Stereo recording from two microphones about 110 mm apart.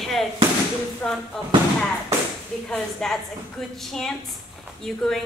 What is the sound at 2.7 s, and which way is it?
A woman's voice, 5° left (ahead or behind).